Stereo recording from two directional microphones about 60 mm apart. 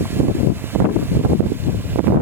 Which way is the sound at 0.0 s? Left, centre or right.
Right.